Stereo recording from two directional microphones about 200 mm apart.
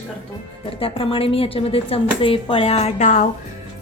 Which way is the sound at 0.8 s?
25° left (ahead or behind).